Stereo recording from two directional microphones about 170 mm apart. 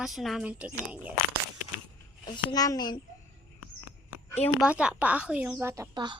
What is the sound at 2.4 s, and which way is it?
Speech, 20° left (ahead or behind).